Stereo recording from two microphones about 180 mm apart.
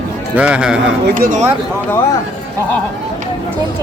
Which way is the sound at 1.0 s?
55° right (ahead or behind).